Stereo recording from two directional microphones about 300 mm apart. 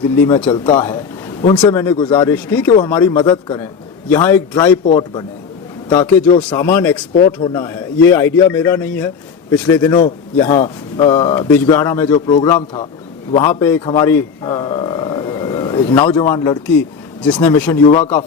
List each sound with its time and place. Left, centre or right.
0.3 s a man's voice: centre
5.9 s a man's voice: centre
6.2 s a man's voice: centre